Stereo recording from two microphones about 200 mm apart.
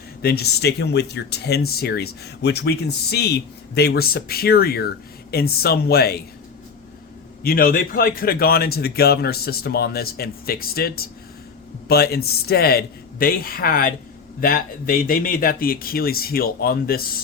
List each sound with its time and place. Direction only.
0.2 s speech: 50° left (ahead or behind)
7.4 s speech: 45° left (ahead or behind)